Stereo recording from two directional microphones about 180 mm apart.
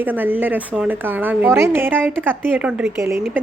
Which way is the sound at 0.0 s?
10° right (ahead or behind).